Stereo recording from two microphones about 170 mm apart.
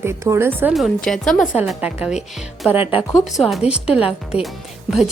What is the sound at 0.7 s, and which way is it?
Speech, centre (ahead or behind).